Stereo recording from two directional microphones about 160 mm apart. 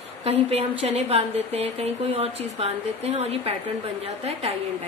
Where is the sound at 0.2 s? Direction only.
40° right (ahead or behind).